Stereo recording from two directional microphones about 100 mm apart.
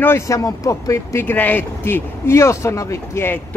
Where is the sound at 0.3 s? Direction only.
35° left (ahead or behind).